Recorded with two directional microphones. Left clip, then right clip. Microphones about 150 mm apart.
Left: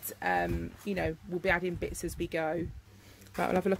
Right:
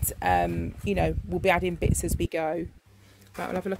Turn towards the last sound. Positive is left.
turn(degrees=35)  # may be behind; listen again after turning